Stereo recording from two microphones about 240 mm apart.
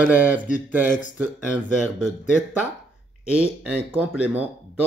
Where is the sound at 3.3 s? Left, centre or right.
Centre.